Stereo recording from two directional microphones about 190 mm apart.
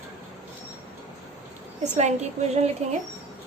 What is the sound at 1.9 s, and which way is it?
Speech, 35° right (ahead or behind).